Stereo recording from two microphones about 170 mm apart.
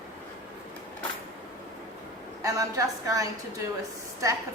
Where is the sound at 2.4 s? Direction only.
20° right (ahead or behind).